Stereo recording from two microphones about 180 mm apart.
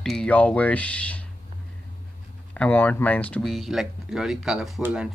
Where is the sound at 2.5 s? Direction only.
10° left (ahead or behind).